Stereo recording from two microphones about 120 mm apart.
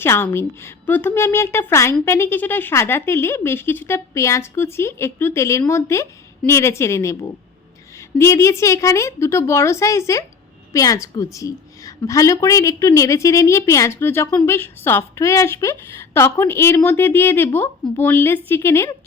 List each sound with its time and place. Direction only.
0.0 s a woman's voice: 20° left (ahead or behind)